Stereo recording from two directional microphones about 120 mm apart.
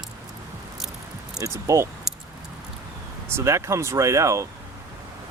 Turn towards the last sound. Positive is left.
turn(degrees=-25)  # may be behind; listen again after turning